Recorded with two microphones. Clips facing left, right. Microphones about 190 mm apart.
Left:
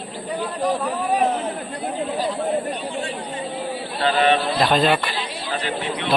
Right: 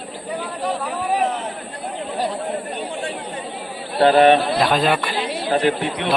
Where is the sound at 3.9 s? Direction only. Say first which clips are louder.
Right 6 dB; 55° right (ahead or behind).